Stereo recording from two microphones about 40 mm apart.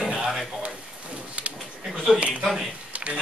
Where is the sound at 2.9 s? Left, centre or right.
Right.